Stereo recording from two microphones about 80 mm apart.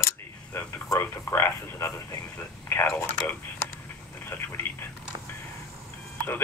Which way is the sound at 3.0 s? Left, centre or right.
Left.